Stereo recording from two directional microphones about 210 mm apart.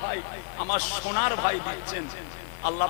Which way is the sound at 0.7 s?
20° left (ahead or behind).